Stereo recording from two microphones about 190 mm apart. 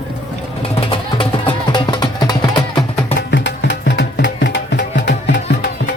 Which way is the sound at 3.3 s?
70° left (ahead or behind).